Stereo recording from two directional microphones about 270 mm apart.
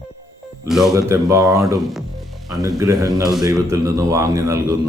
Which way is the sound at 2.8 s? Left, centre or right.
Centre.